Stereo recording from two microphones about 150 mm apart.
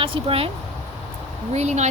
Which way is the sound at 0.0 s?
35° right (ahead or behind).